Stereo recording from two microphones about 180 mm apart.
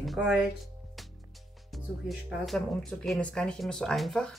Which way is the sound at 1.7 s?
Centre (ahead or behind).